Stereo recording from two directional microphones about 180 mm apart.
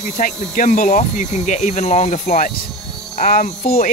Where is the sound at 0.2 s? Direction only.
50° left (ahead or behind).